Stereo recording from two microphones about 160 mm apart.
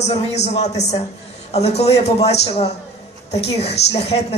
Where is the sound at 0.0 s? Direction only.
40° left (ahead or behind).